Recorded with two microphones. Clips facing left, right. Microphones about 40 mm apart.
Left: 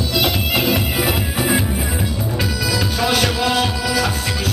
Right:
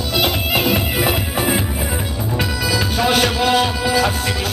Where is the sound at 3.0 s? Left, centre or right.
Right.